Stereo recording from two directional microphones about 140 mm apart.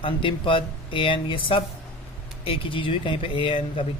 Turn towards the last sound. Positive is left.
turn(degrees=40)  # may be behind; listen again after turning